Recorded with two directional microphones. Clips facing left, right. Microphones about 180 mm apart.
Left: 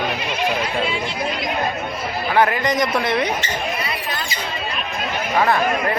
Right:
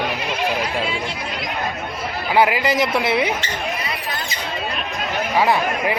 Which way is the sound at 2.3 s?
10° right (ahead or behind).